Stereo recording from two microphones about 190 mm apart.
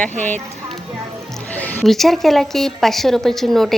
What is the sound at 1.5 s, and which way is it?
A woman's voice, 10° left (ahead or behind).